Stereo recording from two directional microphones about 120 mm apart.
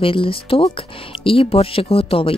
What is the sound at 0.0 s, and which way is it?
Speech, 50° left (ahead or behind).